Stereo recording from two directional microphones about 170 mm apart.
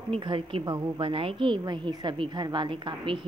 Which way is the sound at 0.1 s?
30° right (ahead or behind).